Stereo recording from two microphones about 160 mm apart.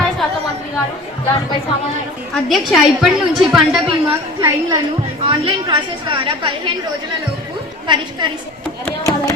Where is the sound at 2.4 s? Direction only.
Centre (ahead or behind).